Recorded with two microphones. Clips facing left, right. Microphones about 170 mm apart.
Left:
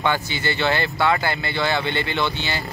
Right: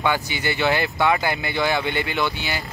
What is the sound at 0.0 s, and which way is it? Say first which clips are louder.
Speech: even; 15° right (ahead or behind).